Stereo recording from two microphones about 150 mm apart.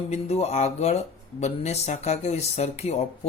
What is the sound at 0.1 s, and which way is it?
Speech, 45° left (ahead or behind).